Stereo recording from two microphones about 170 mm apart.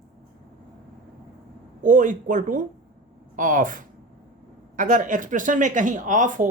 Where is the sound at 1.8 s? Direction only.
50° right (ahead or behind).